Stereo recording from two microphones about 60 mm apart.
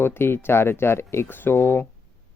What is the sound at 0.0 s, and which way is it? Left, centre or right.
Speech, left.